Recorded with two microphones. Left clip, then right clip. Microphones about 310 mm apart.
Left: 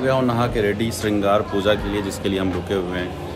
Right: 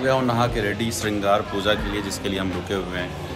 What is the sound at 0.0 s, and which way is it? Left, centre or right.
Speech, centre.